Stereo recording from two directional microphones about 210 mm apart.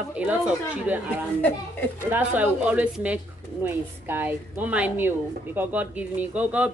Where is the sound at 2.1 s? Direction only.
10° right (ahead or behind).